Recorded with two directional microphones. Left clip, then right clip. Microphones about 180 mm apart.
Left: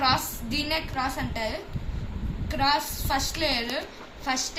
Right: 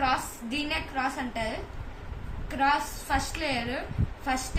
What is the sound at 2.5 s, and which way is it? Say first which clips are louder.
A woman's voice: left 1 dB; 20° right (ahead or behind).